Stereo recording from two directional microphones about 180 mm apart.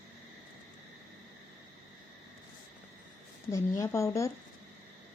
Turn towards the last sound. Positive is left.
turn(degrees=15)  # may be behind; listen again after turning